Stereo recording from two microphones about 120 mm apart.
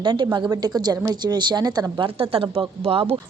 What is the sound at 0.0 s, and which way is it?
Speech, 35° right (ahead or behind).